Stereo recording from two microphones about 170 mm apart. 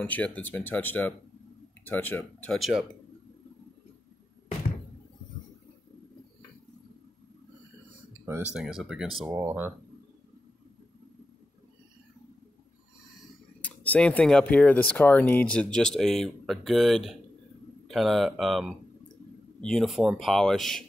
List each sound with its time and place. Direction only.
0.0 s speech: 10° left (ahead or behind)
8.5 s speech: centre (ahead or behind)
9.3 s speech: 15° right (ahead or behind)
13.6 s speech: 10° left (ahead or behind)